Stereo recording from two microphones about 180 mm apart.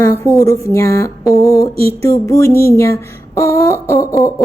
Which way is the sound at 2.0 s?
15° left (ahead or behind).